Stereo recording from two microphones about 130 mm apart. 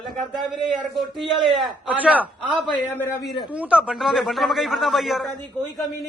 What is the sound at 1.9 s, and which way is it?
Speech, 10° right (ahead or behind).